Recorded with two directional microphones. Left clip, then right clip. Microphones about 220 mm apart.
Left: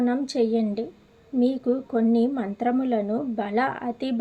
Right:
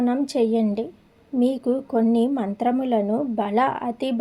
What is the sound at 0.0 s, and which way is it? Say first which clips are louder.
Speech: right 2 dB; 25° right (ahead or behind).